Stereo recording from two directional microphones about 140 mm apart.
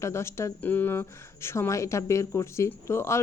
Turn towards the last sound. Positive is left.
turn(degrees=20)  # may be behind; listen again after turning